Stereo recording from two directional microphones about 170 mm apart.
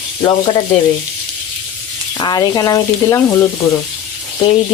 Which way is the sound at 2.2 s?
25° left (ahead or behind).